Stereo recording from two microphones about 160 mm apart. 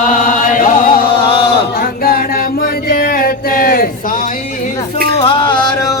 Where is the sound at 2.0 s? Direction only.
65° left (ahead or behind).